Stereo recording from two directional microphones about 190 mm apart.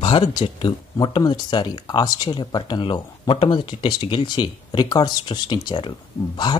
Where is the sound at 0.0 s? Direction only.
30° left (ahead or behind).